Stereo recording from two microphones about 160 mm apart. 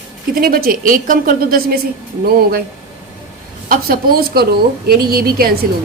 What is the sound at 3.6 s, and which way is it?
A woman's voice, 65° right (ahead or behind).